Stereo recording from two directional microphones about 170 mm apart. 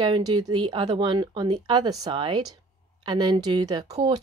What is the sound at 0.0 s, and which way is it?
Speech, 30° right (ahead or behind).